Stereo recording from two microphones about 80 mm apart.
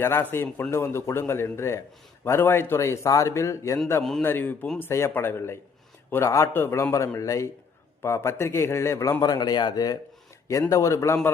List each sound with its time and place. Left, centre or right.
0.0 s a man's voice: left
4.2 s a man's voice: left
7.2 s speech: left
9.2 s a man's voice: left
10.5 s speech: left